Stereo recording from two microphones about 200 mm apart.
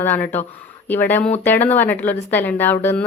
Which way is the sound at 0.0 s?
10° left (ahead or behind).